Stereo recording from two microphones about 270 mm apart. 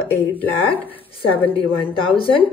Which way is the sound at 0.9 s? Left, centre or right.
Centre.